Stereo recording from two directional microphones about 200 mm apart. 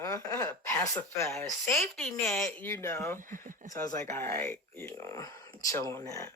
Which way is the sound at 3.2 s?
40° right (ahead or behind).